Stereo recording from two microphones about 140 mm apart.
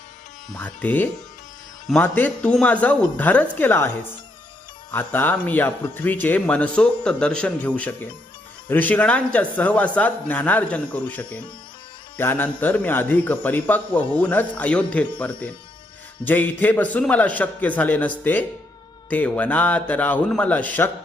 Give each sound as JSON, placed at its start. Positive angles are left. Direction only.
{"t": 0.5, "sound": "a man's voice", "side_deg": 10}